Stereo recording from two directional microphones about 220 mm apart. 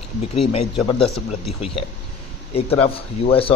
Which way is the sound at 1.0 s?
Centre (ahead or behind).